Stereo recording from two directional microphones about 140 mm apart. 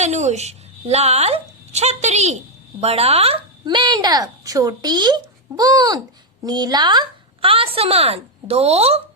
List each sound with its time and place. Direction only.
0.0 s a woman's voice: 55° right (ahead or behind)
3.7 s a woman's voice: 30° right (ahead or behind); by 9.0 s 45° right (ahead or behind)